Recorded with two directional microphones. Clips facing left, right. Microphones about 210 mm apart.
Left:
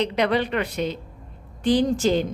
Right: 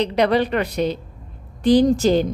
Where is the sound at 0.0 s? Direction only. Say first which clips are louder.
Right 4 dB; 35° right (ahead or behind).